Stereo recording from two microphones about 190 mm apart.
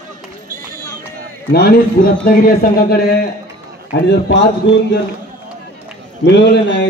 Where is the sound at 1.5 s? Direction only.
55° left (ahead or behind).